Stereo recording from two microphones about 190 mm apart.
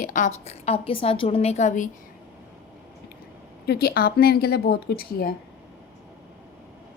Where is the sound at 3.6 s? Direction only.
60° left (ahead or behind).